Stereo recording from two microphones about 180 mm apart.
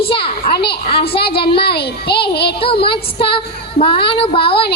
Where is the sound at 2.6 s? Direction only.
30° left (ahead or behind).